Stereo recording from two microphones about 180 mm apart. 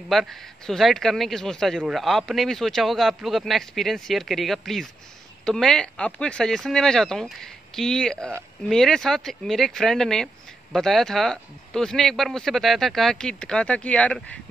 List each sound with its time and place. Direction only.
0.1 s speech: centre (ahead or behind)